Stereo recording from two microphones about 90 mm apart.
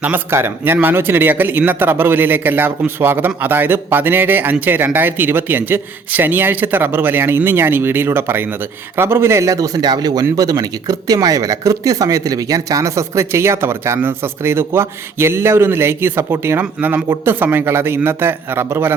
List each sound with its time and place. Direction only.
0.0 s a man's voice: 20° right (ahead or behind)